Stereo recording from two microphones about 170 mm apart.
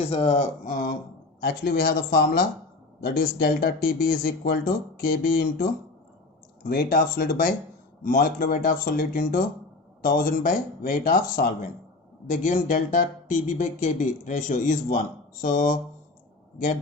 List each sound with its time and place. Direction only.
0.0 s speech: 35° left (ahead or behind); by 5.6 s 55° left (ahead or behind)
6.7 s speech: 60° left (ahead or behind)